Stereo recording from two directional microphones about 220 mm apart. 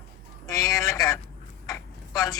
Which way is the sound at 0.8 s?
15° left (ahead or behind).